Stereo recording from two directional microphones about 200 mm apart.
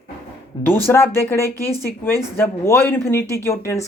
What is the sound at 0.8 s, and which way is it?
Speech, 10° left (ahead or behind).